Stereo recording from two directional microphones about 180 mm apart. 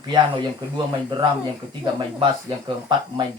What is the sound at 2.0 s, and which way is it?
Speech, 25° right (ahead or behind).